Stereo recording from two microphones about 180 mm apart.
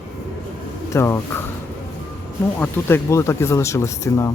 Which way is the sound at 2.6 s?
10° left (ahead or behind).